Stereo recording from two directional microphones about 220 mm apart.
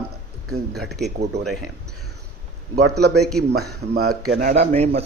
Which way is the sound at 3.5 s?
45° right (ahead or behind).